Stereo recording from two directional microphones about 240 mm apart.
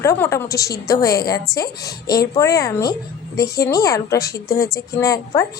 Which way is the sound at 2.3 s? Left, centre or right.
Centre.